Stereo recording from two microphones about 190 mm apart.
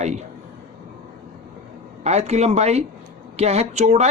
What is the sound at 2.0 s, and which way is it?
Speech, 35° right (ahead or behind).